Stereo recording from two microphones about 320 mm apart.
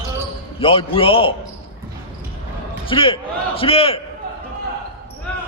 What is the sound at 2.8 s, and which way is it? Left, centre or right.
A man's voice, centre.